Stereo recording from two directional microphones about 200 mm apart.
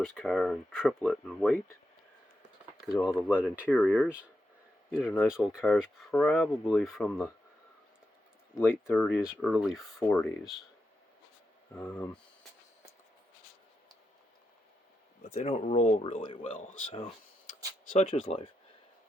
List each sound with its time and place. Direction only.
0.0 s speech: centre (ahead or behind)
2.8 s speech: centre (ahead or behind)
8.5 s speech: 10° left (ahead or behind)
11.8 s speech: 5° left (ahead or behind)
15.3 s speech: 30° left (ahead or behind)
16.2 s speech: 25° left (ahead or behind)
16.6 s speech: 40° left (ahead or behind)
17.8 s speech: 40° left (ahead or behind)